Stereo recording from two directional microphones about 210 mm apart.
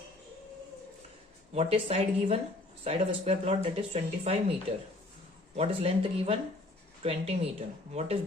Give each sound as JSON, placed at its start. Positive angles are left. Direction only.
{"t": 1.5, "sound": "speech", "side_deg": -30}
{"t": 5.5, "sound": "speech", "side_deg": -25}